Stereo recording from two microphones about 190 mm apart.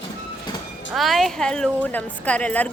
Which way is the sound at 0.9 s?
Centre (ahead or behind).